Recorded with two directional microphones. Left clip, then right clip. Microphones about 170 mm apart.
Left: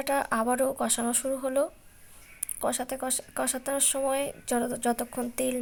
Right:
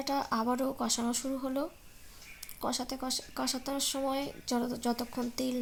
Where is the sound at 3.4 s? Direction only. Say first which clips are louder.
Left 4 dB; 45° left (ahead or behind).